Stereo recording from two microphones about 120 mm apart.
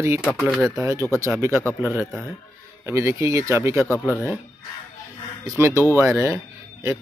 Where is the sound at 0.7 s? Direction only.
25° right (ahead or behind).